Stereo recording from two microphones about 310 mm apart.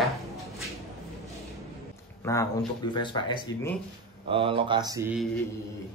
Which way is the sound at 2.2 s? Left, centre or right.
Centre.